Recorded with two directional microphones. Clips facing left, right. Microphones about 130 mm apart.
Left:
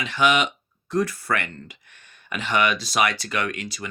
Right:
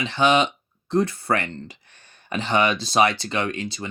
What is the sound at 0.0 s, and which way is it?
Speech, 30° right (ahead or behind).